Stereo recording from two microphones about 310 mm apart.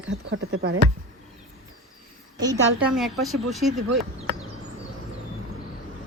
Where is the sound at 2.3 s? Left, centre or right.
Centre.